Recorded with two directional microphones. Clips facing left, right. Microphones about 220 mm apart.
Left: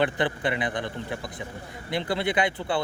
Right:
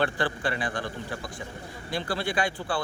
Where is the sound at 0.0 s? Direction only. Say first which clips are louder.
Left 3 dB; 20° left (ahead or behind).